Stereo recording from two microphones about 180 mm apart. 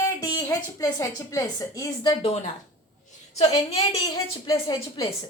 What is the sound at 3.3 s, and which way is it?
Speech, 35° left (ahead or behind).